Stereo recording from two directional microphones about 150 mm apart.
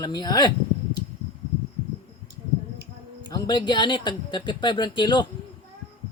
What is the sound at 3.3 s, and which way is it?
Speech, 30° left (ahead or behind).